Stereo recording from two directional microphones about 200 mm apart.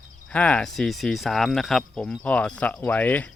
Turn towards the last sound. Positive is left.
turn(degrees=10)  # may be behind; listen again after turning